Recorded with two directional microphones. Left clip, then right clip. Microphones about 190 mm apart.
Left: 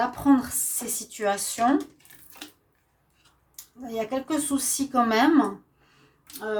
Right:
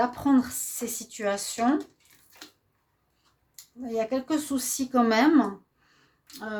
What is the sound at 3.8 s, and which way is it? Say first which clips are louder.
Speech: right 1 dB; 35° right (ahead or behind).